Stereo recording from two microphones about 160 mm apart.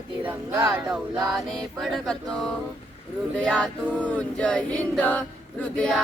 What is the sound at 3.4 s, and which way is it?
Choir, 5° left (ahead or behind).